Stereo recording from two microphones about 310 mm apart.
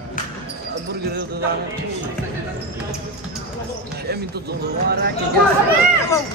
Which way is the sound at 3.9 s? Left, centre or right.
Right.